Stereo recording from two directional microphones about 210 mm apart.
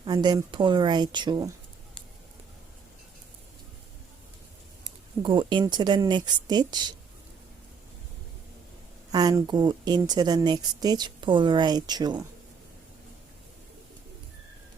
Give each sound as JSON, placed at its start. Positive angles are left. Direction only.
{"t": 0.0, "sound": "speech", "side_deg": -20}
{"t": 5.2, "sound": "speech", "side_deg": -20}
{"t": 9.1, "sound": "speech", "side_deg": -20}